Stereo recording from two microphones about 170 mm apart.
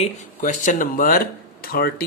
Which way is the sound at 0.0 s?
45° left (ahead or behind).